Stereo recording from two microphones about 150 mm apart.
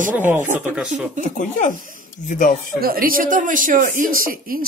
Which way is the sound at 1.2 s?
60° left (ahead or behind).